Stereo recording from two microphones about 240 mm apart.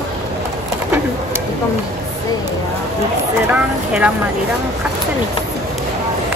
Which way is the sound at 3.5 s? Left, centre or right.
Centre.